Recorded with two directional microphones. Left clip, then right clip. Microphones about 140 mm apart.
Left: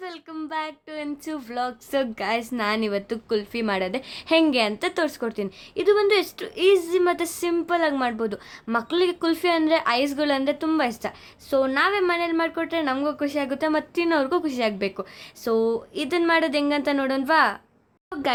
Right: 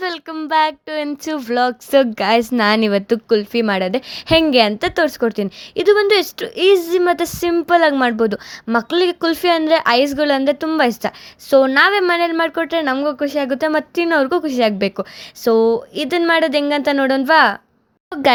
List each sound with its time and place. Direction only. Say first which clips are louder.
0.0 s a woman's voice: right 11 dB; 70° right (ahead or behind); by 18.3 s 50° right (ahead or behind)